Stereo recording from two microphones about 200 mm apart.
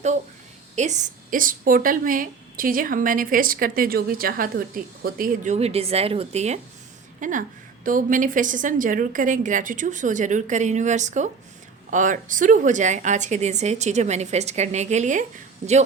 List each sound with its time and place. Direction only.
0.8 s a woman's voice: 35° right (ahead or behind)